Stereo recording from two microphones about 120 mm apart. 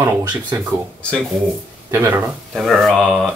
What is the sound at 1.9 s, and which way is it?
Speech, 20° right (ahead or behind).